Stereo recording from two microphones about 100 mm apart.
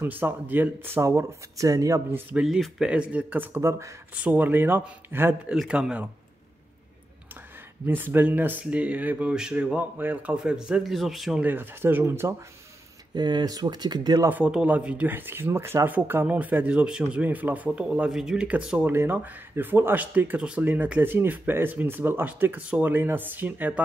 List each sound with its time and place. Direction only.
0.0 s speech: 20° right (ahead or behind); by 2.0 s 35° right (ahead or behind)
2.4 s speech: 5° right (ahead or behind); by 5.3 s 20° right (ahead or behind)
5.5 s speech: 10° right (ahead or behind)
7.8 s speech: 20° right (ahead or behind); by 11.4 s 5° right (ahead or behind)
11.4 s speech: 20° right (ahead or behind)
13.1 s speech: 45° right (ahead or behind)
14.3 s speech: 10° right (ahead or behind)